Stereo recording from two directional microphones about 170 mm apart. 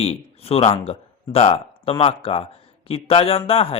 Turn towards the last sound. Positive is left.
turn(degrees=35)  # may be behind; listen again after turning